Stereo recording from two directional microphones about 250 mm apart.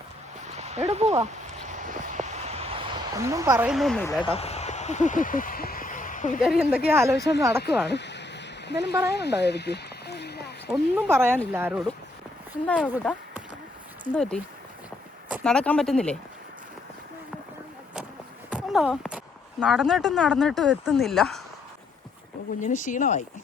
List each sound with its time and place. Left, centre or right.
0.4 s a sound: right
3.2 s speech: centre
4.2 s a sound: left
6.4 s speech: centre
7.2 s speech: left
10.7 s speech: centre
18.5 s speech: centre
22.6 s speech: left